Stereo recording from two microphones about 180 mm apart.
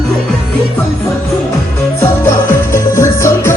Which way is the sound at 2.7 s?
15° left (ahead or behind).